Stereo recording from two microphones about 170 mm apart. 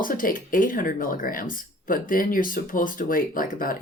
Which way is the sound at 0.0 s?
55° left (ahead or behind).